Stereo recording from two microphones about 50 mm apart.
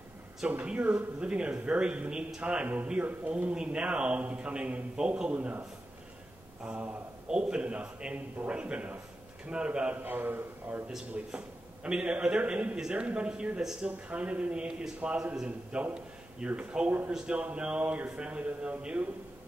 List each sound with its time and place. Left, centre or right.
0.7 s a man's voice: right
6.6 s speech: right
7.2 s a man's voice: centre
10.0 s a man's voice: right
11.3 s a man's voice: right